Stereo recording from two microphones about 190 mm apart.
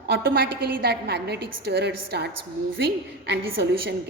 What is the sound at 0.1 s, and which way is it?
A woman's voice, 55° right (ahead or behind).